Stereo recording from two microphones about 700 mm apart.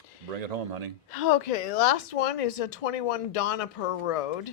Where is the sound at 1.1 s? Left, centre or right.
Left.